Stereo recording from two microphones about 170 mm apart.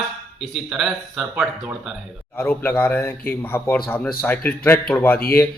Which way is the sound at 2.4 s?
15° left (ahead or behind).